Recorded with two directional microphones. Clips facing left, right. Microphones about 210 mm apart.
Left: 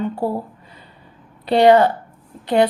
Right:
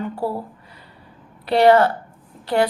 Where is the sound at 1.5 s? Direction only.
20° left (ahead or behind).